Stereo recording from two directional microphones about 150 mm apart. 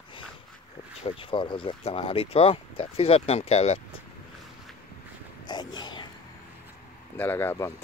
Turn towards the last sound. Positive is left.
turn(degrees=15)  # may be behind; listen again after turning